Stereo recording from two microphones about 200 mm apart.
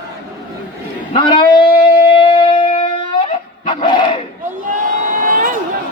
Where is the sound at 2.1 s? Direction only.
25° left (ahead or behind).